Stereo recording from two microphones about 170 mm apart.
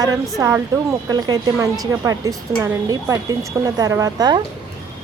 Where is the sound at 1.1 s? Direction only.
25° right (ahead or behind).